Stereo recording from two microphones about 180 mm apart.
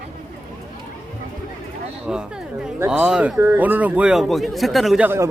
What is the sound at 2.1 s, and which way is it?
A man's voice, 5° right (ahead or behind).